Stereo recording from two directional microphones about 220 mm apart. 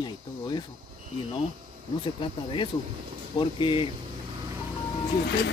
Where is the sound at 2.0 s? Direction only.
20° left (ahead or behind).